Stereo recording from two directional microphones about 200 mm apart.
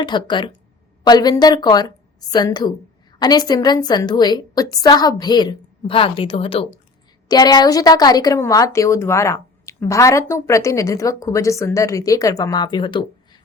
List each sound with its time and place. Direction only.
0.0 s a woman's voice: 20° left (ahead or behind)